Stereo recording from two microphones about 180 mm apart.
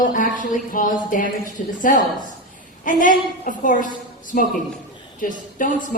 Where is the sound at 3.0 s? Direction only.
45° left (ahead or behind).